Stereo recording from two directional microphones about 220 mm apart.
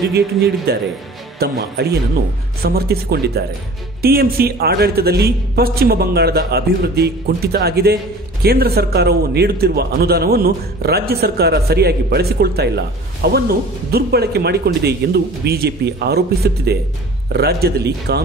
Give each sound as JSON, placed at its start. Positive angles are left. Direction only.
{"t": 0.1, "sound": "speech", "side_deg": -45}